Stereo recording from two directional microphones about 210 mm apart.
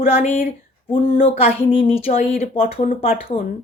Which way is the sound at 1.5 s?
25° left (ahead or behind).